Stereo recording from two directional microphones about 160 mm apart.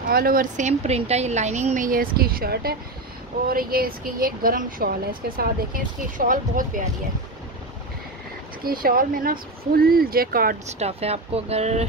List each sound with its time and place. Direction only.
0.1 s speech: 65° right (ahead or behind)
8.6 s speech: 65° right (ahead or behind)
10.7 s speech: 40° right (ahead or behind)